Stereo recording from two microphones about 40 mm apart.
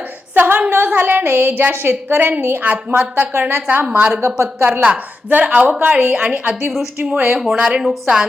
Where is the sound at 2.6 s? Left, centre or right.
Right.